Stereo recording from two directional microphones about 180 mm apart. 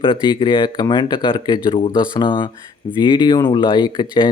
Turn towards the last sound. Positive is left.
turn(degrees=25)  # may be behind; listen again after turning